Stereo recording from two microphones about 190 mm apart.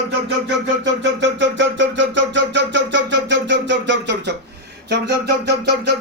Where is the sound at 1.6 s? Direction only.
75° right (ahead or behind).